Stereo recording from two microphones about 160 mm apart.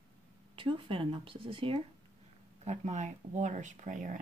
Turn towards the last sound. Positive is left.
turn(degrees=-50)  # may be behind; listen again after turning